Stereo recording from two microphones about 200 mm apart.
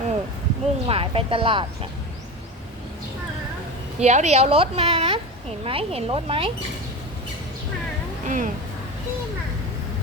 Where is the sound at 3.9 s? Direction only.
35° right (ahead or behind).